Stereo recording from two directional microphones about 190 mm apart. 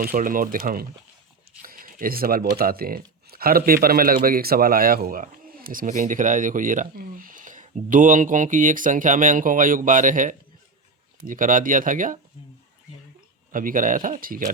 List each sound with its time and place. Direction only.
0.0 s speech: 50° right (ahead or behind)
1.6 s a sound: 45° right (ahead or behind)
2.6 s speech: 50° right (ahead or behind)
13.5 s speech: 45° right (ahead or behind)